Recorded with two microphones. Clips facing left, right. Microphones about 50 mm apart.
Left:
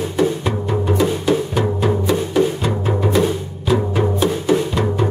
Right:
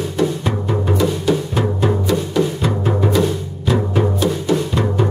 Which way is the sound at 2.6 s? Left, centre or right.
Centre.